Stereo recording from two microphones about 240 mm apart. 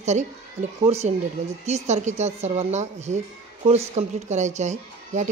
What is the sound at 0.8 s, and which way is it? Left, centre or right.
A woman's voice, right.